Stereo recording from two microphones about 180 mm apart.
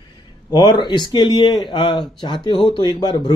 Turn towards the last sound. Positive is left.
turn(degrees=25)  # may be behind; listen again after turning